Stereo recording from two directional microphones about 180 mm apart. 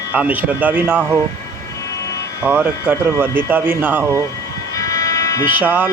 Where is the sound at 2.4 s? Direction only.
10° right (ahead or behind).